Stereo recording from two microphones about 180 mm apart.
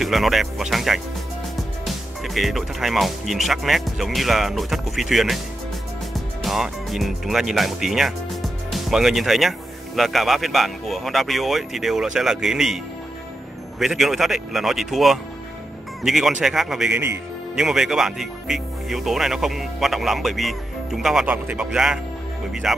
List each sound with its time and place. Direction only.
0.0 s speech: centre (ahead or behind)